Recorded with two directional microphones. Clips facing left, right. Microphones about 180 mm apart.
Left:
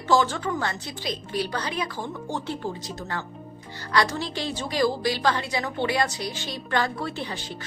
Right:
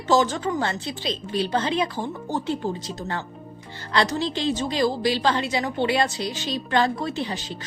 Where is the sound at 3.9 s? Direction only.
20° right (ahead or behind).